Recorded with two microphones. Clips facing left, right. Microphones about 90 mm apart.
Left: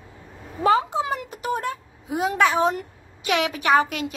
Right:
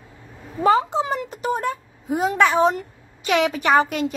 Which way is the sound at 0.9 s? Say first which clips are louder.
Right 2 dB; 10° left (ahead or behind).